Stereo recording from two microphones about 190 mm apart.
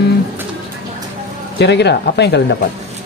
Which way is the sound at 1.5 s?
65° left (ahead or behind).